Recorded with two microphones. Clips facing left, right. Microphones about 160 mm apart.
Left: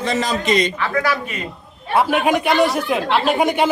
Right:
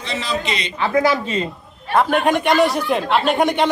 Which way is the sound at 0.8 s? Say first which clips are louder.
Right 3 dB; 25° right (ahead or behind).